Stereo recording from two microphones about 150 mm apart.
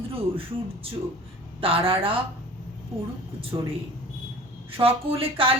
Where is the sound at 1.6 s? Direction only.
40° right (ahead or behind).